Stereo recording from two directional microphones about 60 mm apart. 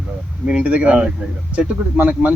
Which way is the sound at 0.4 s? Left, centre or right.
Centre.